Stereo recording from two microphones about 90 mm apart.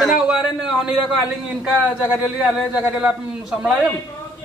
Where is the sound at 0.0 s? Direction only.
5° right (ahead or behind).